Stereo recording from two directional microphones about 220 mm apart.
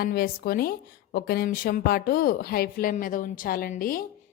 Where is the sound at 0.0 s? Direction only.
45° left (ahead or behind).